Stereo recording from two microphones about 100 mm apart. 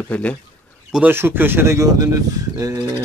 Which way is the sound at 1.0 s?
20° right (ahead or behind).